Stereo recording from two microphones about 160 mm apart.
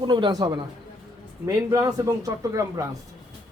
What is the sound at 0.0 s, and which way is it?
A man's voice, 30° right (ahead or behind).